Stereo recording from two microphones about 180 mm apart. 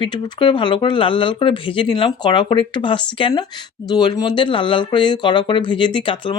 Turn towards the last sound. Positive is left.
turn(degrees=30)  # may be behind; listen again after turning